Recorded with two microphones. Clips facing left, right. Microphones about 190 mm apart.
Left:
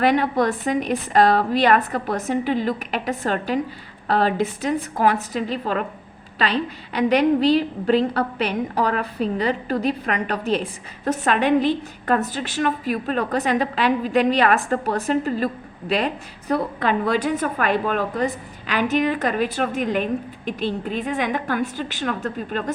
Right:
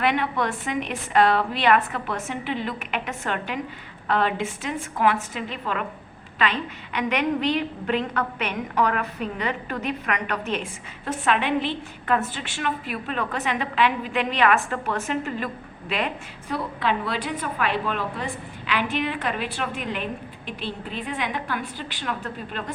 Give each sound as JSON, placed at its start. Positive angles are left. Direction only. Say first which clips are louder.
{"t": 0.0, "sound": "a woman's voice", "louder": "left 5 dB", "side_deg": 40}